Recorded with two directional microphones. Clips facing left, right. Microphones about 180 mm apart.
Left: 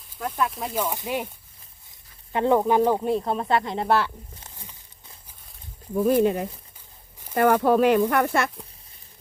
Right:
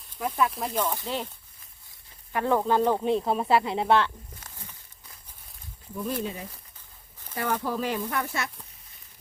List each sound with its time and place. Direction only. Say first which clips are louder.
0.2 s speech: even; 5° right (ahead or behind); by 1.3 s 15° left (ahead or behind)
2.3 s speech: left 4 dB; 20° left (ahead or behind); by 4.1 s 5° left (ahead or behind)
4.4 s a sound: left 1 dB; 20° left (ahead or behind)
5.9 s speech: left 11 dB; 55° left (ahead or behind)